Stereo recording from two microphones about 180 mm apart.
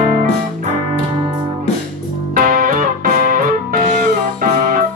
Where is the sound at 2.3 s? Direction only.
50° right (ahead or behind).